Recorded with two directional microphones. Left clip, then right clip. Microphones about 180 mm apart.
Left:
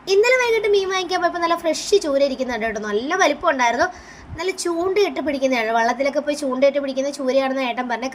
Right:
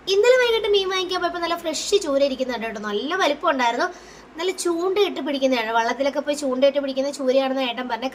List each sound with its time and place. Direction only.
0.1 s a woman's voice: 15° left (ahead or behind)